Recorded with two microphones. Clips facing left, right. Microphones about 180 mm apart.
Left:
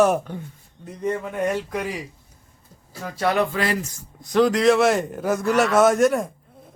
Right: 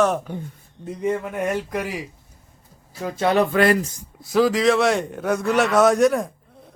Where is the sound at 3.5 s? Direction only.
55° right (ahead or behind).